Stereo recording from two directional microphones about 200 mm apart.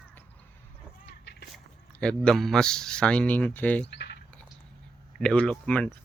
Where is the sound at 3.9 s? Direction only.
60° left (ahead or behind).